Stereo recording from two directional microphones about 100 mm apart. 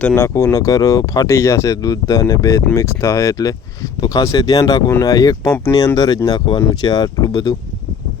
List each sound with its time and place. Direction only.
0.2 s speech: 30° left (ahead or behind)
6.5 s speech: 50° left (ahead or behind)